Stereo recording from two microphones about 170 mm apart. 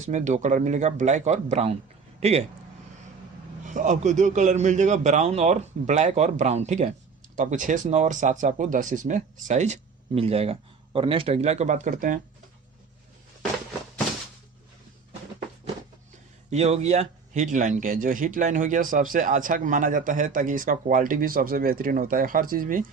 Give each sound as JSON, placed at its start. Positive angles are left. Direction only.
{"t": 0.0, "sound": "speech", "side_deg": -45}
{"t": 3.7, "sound": "speech", "side_deg": -50}
{"t": 16.5, "sound": "speech", "side_deg": -40}